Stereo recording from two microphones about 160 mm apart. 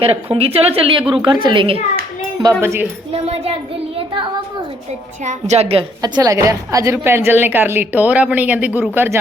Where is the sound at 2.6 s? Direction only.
15° right (ahead or behind).